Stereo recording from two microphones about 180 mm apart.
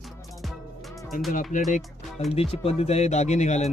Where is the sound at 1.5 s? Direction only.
45° left (ahead or behind).